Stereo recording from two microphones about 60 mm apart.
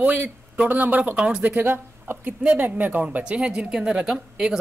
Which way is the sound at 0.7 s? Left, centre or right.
Right.